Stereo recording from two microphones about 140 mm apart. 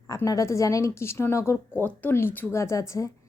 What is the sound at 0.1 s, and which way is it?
A woman's voice, 25° left (ahead or behind).